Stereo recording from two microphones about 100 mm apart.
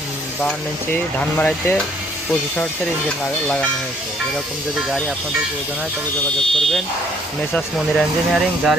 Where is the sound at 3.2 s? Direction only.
15° left (ahead or behind).